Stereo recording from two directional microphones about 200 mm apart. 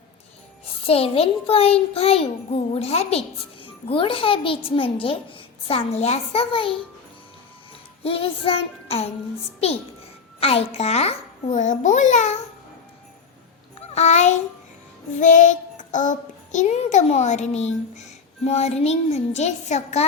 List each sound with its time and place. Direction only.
0.9 s a child's voice: 30° left (ahead or behind)
8.0 s a child's voice: 30° left (ahead or behind)
10.4 s a child's voice: 30° left (ahead or behind)
13.9 s a child's voice: 35° left (ahead or behind)
15.2 s child singing: 40° left (ahead or behind)
18.4 s a child's voice: 30° left (ahead or behind)